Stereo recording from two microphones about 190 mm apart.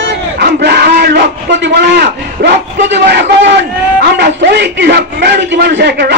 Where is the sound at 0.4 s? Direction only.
60° right (ahead or behind).